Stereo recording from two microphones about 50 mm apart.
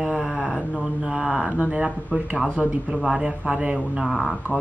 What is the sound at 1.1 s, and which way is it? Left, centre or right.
Speech, centre.